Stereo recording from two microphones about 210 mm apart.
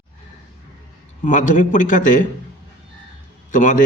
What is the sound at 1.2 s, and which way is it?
A man's voice, 35° left (ahead or behind).